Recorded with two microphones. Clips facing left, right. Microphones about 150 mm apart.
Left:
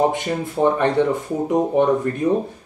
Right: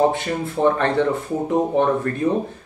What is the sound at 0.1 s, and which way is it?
Speech, 15° left (ahead or behind).